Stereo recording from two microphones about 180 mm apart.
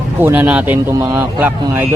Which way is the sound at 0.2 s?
10° right (ahead or behind).